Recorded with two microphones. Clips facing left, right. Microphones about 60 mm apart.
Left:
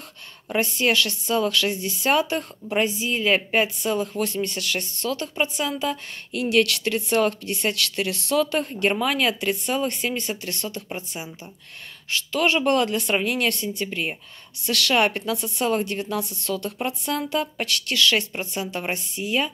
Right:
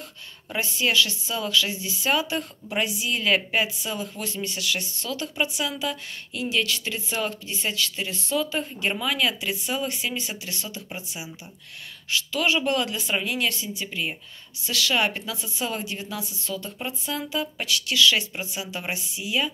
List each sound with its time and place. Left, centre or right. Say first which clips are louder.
0.6 s speech: left 2 dB; left
3.5 s speech: left 4 dB; left
6.3 s speech: left 6 dB; left
12.1 s speech: left 2 dB; left